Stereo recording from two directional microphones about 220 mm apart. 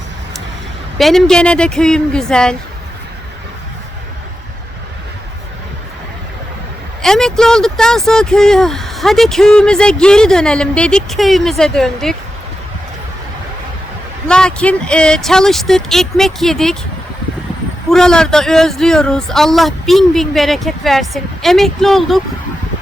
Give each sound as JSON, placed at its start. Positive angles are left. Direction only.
{"t": 0.9, "sound": "speech", "side_deg": 0}
{"t": 7.0, "sound": "speech", "side_deg": 0}
{"t": 14.3, "sound": "speech", "side_deg": 5}
{"t": 17.8, "sound": "speech", "side_deg": 0}